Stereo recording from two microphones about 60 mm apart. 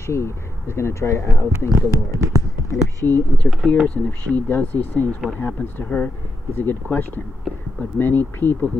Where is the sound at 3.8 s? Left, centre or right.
Left.